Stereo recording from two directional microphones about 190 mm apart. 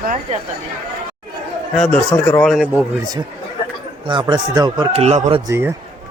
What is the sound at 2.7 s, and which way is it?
Speech, 15° right (ahead or behind).